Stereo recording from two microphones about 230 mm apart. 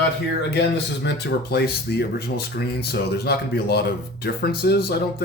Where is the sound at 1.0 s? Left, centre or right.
Left.